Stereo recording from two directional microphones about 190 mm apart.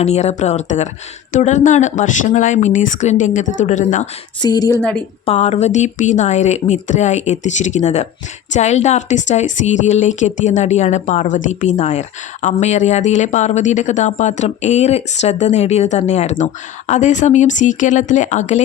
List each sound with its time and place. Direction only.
0.0 s speech: 35° left (ahead or behind)
4.4 s a woman's voice: 20° left (ahead or behind)
4.8 s a woman's voice: 5° left (ahead or behind)
5.2 s speech: 30° left (ahead or behind)